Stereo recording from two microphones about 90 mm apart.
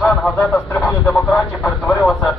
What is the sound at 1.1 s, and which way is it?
Vehicle, 5° left (ahead or behind).